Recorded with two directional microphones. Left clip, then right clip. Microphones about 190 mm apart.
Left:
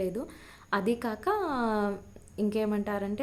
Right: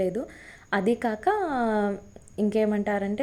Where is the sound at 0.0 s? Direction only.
15° right (ahead or behind).